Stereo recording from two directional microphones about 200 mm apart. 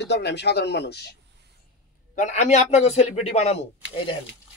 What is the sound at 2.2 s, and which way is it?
A man's voice, 35° left (ahead or behind).